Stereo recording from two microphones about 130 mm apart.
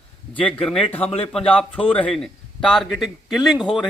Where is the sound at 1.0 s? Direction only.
50° left (ahead or behind).